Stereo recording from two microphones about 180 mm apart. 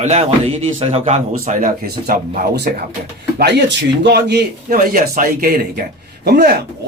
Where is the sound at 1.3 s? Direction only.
45° right (ahead or behind).